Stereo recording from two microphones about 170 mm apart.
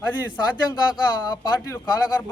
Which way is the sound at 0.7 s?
25° left (ahead or behind).